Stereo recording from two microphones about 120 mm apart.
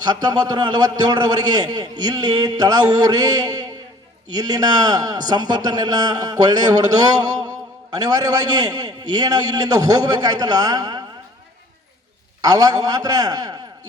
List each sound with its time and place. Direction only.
0.0 s a man's voice: 35° right (ahead or behind)
12.4 s a man's voice: 30° right (ahead or behind)